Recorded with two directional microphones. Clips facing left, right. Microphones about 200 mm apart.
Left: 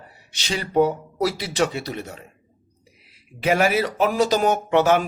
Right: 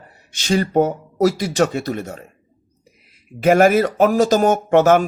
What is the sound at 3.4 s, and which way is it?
A man's voice, 45° right (ahead or behind).